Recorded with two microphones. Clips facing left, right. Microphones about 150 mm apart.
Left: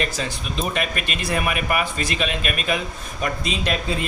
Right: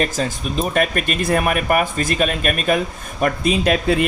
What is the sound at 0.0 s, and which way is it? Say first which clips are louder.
Speech: right 5 dB; 45° right (ahead or behind).